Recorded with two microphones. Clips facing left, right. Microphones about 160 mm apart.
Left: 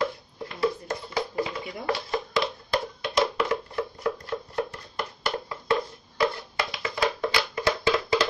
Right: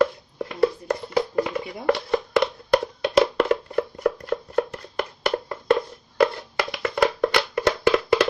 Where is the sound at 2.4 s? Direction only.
65° right (ahead or behind).